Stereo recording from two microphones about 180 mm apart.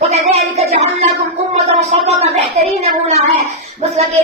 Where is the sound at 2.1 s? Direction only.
35° right (ahead or behind).